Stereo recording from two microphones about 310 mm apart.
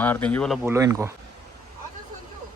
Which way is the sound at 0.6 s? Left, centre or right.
Centre.